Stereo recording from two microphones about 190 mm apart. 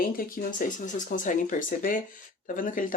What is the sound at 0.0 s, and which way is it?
Speech, 50° left (ahead or behind).